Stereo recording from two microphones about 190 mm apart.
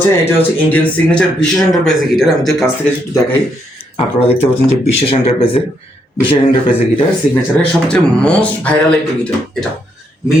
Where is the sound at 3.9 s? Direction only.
30° left (ahead or behind).